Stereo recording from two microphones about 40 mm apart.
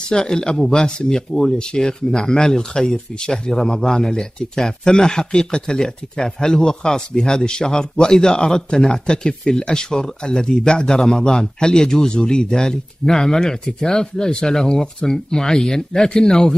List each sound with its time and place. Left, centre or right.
0.1 s speech: centre